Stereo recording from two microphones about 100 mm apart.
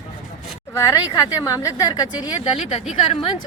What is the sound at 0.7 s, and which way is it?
A woman's voice, 30° left (ahead or behind).